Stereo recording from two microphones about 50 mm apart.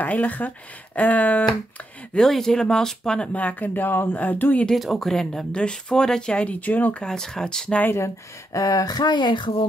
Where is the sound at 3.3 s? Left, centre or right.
Left.